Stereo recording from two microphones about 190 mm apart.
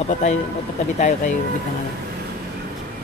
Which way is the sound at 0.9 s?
40° left (ahead or behind).